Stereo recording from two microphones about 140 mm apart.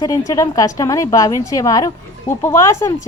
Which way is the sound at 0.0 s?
25° left (ahead or behind).